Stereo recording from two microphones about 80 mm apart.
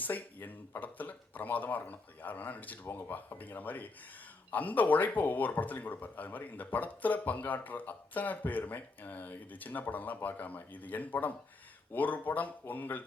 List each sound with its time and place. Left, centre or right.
0.0 s speech: left